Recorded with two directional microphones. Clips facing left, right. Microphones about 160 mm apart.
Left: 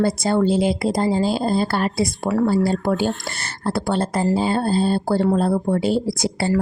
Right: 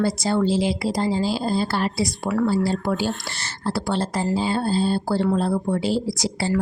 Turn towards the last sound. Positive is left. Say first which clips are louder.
# left 3 dB
turn(degrees=55)  # may be behind; listen again after turning